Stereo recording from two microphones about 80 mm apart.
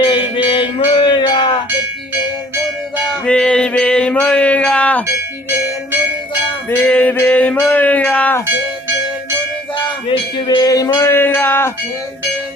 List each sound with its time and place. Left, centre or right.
0.0 s music: left
3.2 s music: centre
6.7 s music: centre
7.7 s a sound: centre
10.1 s music: left
11.1 s speech: left